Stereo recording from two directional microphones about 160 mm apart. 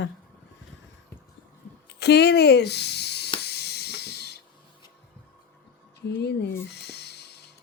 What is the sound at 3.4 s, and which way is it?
Printer, 90° left.